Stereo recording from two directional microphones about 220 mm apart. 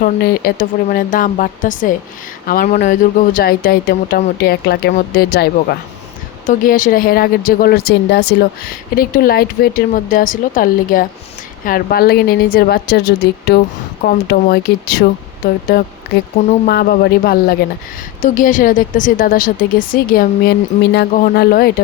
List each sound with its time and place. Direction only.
0.0 s speech: 45° left (ahead or behind)